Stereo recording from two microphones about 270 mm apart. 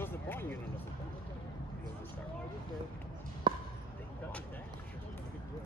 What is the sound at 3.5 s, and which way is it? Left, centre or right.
Basketball bounce, centre.